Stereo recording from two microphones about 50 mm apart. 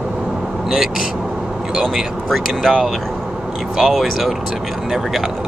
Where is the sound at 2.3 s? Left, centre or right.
Centre.